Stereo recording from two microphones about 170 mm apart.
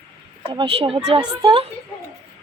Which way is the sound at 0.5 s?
30° right (ahead or behind).